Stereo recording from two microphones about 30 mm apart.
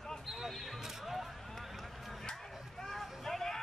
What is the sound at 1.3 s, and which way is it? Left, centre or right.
Run, centre.